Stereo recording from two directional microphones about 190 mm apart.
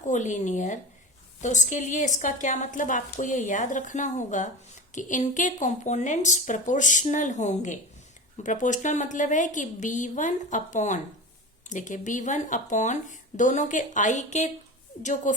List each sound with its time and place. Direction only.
0.1 s a woman's voice: 40° left (ahead or behind)